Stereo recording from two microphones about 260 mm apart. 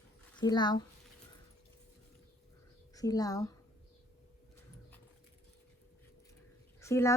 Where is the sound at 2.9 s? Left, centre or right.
Centre.